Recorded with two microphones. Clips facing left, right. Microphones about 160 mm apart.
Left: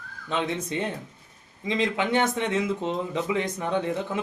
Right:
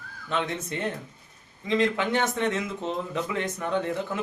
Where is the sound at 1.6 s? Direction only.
15° left (ahead or behind).